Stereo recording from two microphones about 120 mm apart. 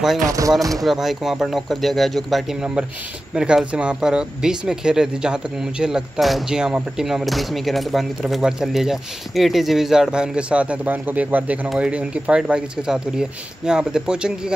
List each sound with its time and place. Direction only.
0.3 s speech: 30° right (ahead or behind)
0.8 s speech: 5° right (ahead or behind)